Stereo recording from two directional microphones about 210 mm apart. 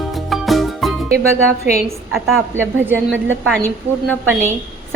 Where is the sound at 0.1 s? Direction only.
Centre (ahead or behind).